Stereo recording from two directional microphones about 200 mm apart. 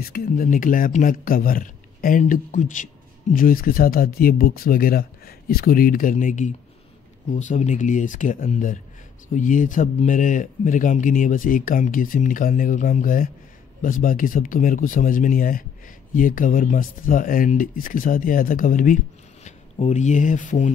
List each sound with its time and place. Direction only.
0.0 s speech: 50° left (ahead or behind)